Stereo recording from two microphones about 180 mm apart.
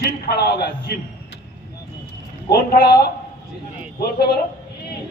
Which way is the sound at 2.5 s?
55° left (ahead or behind).